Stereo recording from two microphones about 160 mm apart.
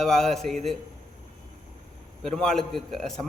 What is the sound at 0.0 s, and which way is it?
Speech, 5° left (ahead or behind).